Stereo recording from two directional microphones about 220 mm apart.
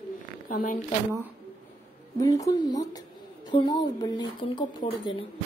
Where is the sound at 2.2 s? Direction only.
15° left (ahead or behind).